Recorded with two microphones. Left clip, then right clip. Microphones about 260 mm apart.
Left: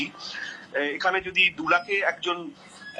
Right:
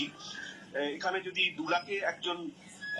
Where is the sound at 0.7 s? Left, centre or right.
Left.